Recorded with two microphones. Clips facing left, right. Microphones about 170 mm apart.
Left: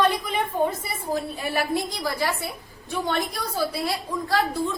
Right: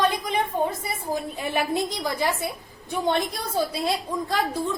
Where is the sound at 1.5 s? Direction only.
20° right (ahead or behind).